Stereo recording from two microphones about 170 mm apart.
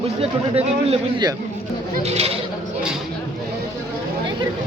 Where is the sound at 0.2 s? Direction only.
35° right (ahead or behind).